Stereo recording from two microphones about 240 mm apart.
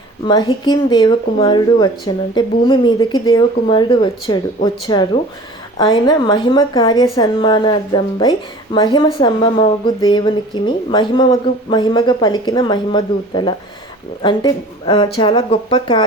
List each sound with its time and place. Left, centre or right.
0.3 s a woman's voice: centre